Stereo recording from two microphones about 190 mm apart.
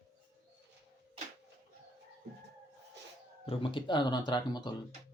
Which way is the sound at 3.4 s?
30° left (ahead or behind).